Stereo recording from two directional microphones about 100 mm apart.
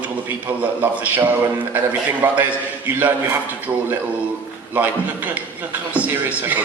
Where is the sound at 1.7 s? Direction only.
15° right (ahead or behind).